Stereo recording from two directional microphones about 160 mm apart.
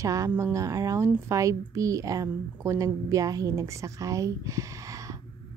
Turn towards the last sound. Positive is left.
turn(degrees=-20)  # may be behind; listen again after turning